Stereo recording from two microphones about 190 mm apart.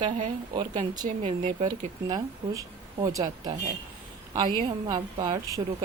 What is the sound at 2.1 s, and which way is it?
Speech, 20° right (ahead or behind).